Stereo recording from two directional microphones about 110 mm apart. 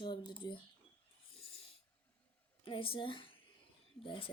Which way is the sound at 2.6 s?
55° left (ahead or behind).